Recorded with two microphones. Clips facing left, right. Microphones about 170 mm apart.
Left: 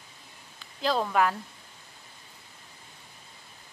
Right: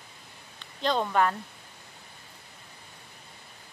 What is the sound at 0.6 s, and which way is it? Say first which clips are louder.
Speech: even; 5° left (ahead or behind).